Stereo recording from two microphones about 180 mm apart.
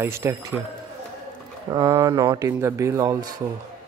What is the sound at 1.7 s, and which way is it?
Speech, 20° right (ahead or behind).